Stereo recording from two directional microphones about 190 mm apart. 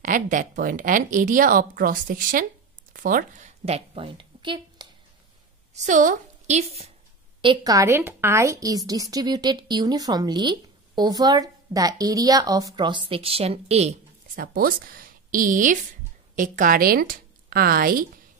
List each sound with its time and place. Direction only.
0.0 s a woman's voice: 45° right (ahead or behind); by 4.8 s 25° right (ahead or behind)
5.8 s a woman's voice: 40° right (ahead or behind)
7.4 s a woman's voice: 20° right (ahead or behind); by 13.9 s 35° right (ahead or behind)
14.3 s a woman's voice: 50° right (ahead or behind)